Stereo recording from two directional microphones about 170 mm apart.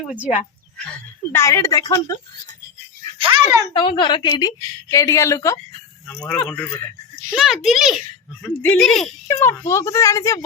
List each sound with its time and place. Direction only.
0.0 s speech: 5° right (ahead or behind)
0.8 s speech: 5° left (ahead or behind)
3.2 s a sound: 30° right (ahead or behind)
3.7 s a woman's voice: 30° left (ahead or behind)
6.1 s speech: 5° left (ahead or behind)
7.3 s a child's voice: centre (ahead or behind)
9.2 s speech: 15° left (ahead or behind)